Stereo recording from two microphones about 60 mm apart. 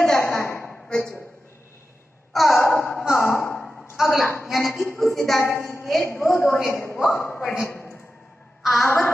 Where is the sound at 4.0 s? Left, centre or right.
Centre.